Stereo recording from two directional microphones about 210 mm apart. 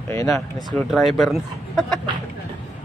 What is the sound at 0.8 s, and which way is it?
Speech, centre (ahead or behind).